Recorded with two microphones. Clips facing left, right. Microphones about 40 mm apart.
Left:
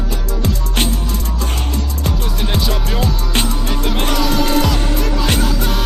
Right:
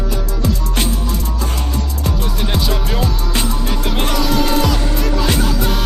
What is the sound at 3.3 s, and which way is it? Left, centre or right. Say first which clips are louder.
Music: left 2 dB; left.